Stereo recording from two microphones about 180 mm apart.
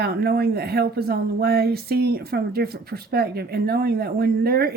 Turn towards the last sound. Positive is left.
turn(degrees=-60)  # may be behind; listen again after turning